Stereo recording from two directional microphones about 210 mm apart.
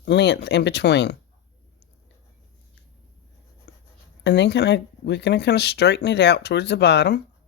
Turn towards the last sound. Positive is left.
turn(degrees=55)  # may be behind; listen again after turning